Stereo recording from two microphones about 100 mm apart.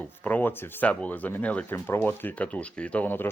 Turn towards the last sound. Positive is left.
turn(degrees=20)  # may be behind; listen again after turning